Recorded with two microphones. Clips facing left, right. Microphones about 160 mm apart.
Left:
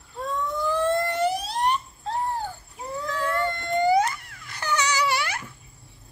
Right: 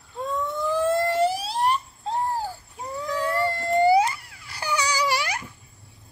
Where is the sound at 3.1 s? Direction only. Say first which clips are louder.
Right 2 dB; 15° right (ahead or behind).